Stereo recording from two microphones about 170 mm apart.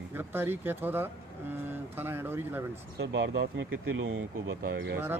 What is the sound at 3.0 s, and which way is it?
Speech, 90° right.